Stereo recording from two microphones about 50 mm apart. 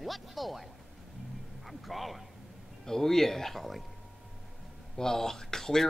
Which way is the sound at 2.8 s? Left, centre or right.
Centre.